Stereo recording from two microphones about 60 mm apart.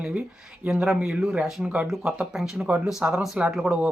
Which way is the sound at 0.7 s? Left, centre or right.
Centre.